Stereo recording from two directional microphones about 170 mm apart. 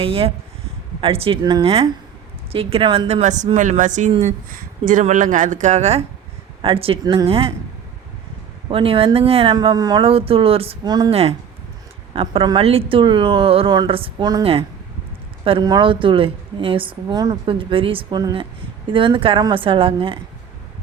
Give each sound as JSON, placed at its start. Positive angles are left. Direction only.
{"t": 0.0, "sound": "a woman's voice", "side_deg": -35}
{"t": 8.7, "sound": "a woman's voice", "side_deg": -30}
{"t": 11.1, "sound": "a woman's voice", "side_deg": -35}